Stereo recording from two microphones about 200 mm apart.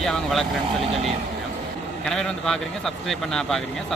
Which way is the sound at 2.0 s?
Centre (ahead or behind).